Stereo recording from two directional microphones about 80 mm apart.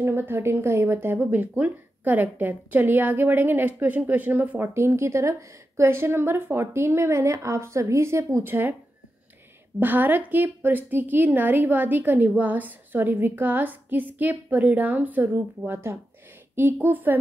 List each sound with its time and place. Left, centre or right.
0.0 s a woman's voice: right
9.8 s a woman's voice: right